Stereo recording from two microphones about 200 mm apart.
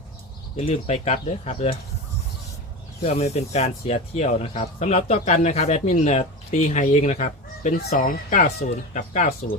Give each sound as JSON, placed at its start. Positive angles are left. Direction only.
{"t": 0.5, "sound": "speech", "side_deg": 30}
{"t": 3.1, "sound": "speech", "side_deg": 30}